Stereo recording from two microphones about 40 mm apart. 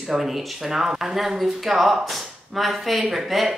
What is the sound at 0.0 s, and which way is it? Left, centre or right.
Speech, centre.